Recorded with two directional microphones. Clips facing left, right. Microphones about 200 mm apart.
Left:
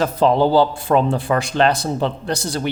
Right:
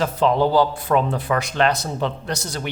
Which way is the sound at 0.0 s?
35° left (ahead or behind).